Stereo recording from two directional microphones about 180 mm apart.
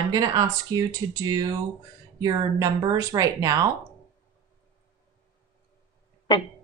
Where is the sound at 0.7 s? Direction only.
20° right (ahead or behind).